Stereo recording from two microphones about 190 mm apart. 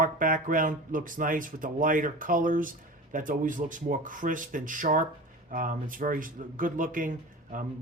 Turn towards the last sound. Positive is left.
turn(degrees=-45)  # may be behind; listen again after turning